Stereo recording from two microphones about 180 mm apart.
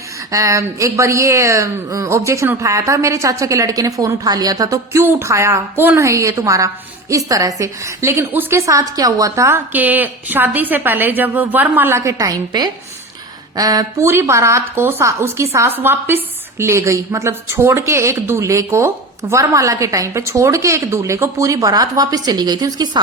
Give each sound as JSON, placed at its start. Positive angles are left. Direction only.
{"t": 0.3, "sound": "speech", "side_deg": -15}